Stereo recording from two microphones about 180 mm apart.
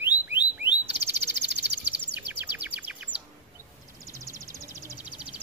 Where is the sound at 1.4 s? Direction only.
70° right (ahead or behind).